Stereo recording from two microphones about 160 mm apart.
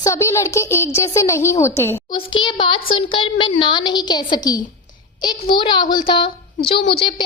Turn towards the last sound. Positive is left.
turn(degrees=30)  # may be behind; listen again after turning